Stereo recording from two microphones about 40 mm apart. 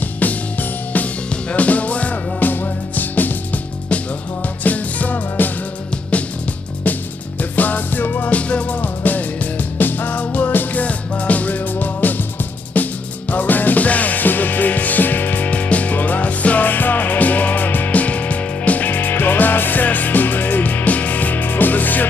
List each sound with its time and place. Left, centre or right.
0.2 s music: left
2.4 s music: left
4.6 s music: left
7.5 s music: left
8.3 s music: left
10.1 s music: left
10.8 s music: left